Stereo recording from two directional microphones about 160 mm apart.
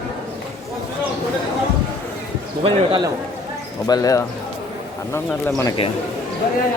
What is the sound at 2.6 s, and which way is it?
Speech, 30° right (ahead or behind).